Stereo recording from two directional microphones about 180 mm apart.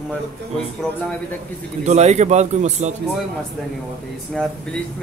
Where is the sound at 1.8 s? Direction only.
40° right (ahead or behind).